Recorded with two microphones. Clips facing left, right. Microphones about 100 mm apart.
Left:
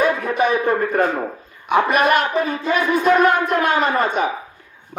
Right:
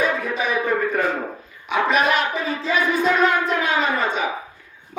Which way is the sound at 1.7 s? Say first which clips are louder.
Left 3 dB; 50° left (ahead or behind).